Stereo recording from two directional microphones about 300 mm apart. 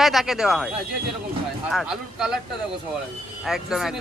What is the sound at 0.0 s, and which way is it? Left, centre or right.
Speech, centre.